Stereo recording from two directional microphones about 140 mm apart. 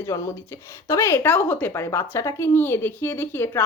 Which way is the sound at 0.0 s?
20° left (ahead or behind).